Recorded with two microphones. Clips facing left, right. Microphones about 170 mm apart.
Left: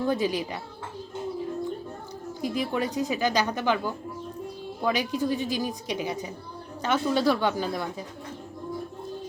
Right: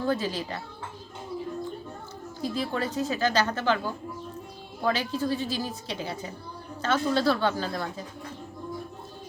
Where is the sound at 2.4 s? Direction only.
15° left (ahead or behind).